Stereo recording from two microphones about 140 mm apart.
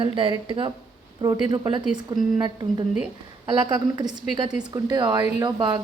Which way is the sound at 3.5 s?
30° right (ahead or behind).